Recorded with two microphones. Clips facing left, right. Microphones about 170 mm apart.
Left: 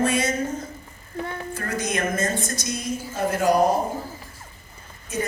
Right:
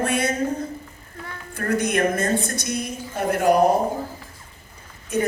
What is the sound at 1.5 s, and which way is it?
A woman's voice, 60° right (ahead or behind).